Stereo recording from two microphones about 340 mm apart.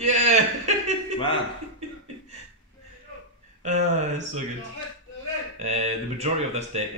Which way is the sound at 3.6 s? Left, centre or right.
Right.